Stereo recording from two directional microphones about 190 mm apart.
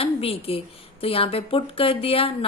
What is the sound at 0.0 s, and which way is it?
A woman's voice, 30° left (ahead or behind).